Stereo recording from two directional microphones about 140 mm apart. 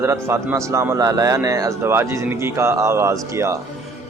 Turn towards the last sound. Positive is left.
turn(degrees=-20)  # may be behind; listen again after turning